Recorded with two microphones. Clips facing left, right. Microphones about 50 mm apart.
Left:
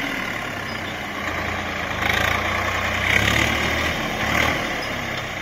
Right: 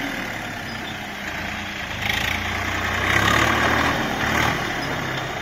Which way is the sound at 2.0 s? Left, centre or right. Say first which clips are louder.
Left 3 dB; left.